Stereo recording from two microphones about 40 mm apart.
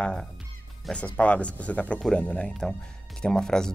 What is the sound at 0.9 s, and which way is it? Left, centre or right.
Speech, left.